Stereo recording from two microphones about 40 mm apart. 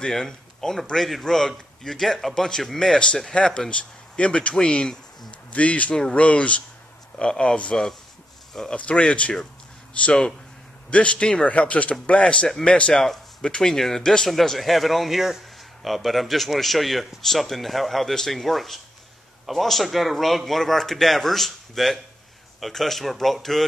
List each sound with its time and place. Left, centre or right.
0.1 s a man's voice: centre
3.3 s speech: centre
3.7 s speech: left
5.5 s speech: left
8.7 s speech: left
12.9 s a man's voice: centre
13.4 s speech: left
13.7 s a man's voice: centre